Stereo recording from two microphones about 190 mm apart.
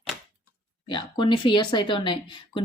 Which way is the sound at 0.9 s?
25° left (ahead or behind).